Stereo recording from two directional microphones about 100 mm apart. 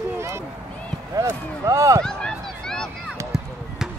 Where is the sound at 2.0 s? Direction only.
5° left (ahead or behind).